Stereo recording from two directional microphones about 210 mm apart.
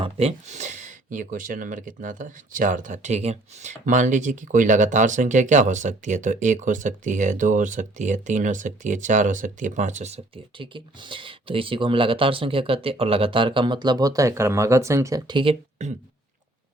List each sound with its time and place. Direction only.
0.0 s speech: 30° right (ahead or behind)